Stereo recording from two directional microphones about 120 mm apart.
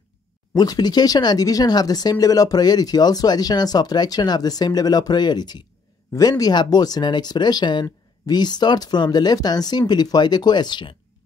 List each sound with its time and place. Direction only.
0.6 s speech: 35° left (ahead or behind)